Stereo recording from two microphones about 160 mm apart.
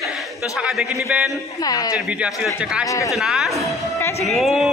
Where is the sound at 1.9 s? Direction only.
5° right (ahead or behind).